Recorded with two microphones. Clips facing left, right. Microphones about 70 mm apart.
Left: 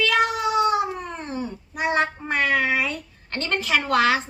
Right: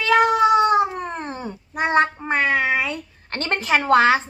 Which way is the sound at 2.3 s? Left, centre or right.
Right.